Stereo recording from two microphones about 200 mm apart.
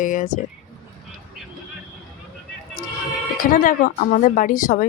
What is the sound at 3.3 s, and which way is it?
Speech, 45° left (ahead or behind).